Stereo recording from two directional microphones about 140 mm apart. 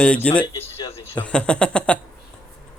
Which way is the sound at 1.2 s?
5° left (ahead or behind).